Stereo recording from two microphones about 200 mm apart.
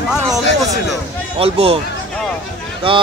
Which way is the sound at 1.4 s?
30° right (ahead or behind).